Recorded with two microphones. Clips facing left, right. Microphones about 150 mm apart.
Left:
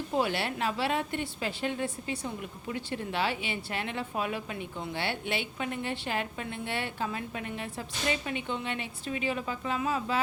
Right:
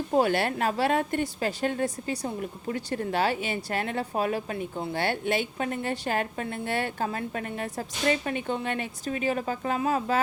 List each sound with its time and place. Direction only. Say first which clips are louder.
0.1 s a woman's voice: right 6 dB; 45° right (ahead or behind)